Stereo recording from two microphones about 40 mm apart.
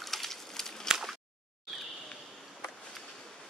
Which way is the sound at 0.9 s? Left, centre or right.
Centre.